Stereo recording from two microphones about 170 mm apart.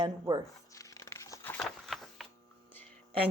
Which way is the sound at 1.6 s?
Centre (ahead or behind).